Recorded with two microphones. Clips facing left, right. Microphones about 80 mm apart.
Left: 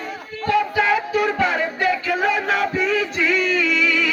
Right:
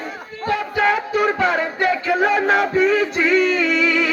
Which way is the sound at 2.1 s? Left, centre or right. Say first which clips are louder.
Right 3 dB; right.